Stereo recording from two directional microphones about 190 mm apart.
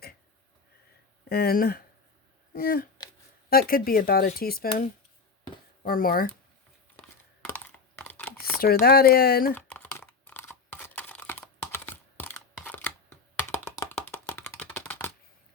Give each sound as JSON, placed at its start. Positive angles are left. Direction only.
{"t": 1.3, "sound": "speech", "side_deg": 55}
{"t": 5.8, "sound": "speech", "side_deg": 50}
{"t": 6.9, "sound": "a sound", "side_deg": 5}
{"t": 8.6, "sound": "speech", "side_deg": 55}
{"t": 9.6, "sound": "computer keyboard", "side_deg": 10}